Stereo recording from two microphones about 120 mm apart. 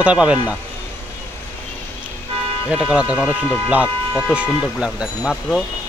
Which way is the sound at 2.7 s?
10° right (ahead or behind).